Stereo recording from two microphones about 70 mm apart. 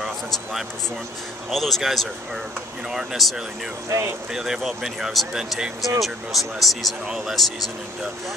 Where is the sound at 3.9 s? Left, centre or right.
Right.